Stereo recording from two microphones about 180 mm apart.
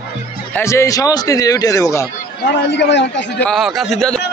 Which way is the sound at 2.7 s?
75° left (ahead or behind).